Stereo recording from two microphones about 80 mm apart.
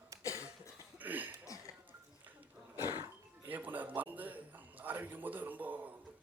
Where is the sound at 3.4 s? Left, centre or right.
Right.